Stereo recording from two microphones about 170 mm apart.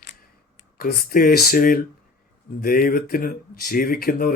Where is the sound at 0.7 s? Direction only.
60° left (ahead or behind).